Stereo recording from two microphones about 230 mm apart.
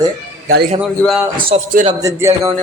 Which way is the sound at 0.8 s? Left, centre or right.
Centre.